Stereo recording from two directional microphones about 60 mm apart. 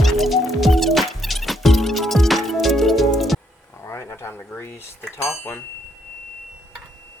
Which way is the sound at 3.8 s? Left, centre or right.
Left.